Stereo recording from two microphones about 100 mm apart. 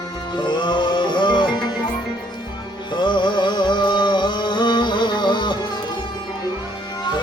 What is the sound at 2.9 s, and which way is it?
Music, 50° left (ahead or behind).